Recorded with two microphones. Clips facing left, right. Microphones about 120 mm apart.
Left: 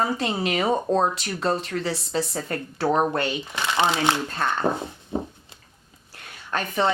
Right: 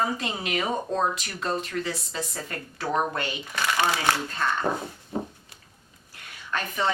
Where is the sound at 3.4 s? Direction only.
20° left (ahead or behind).